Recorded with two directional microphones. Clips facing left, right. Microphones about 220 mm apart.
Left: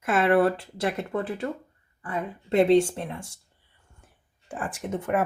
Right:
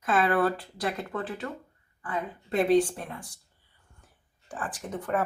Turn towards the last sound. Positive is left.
turn(degrees=25)  # may be behind; listen again after turning